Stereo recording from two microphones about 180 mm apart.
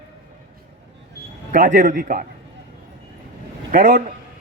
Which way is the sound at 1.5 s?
45° right (ahead or behind).